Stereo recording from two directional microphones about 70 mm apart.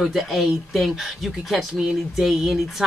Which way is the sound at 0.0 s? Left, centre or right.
Centre.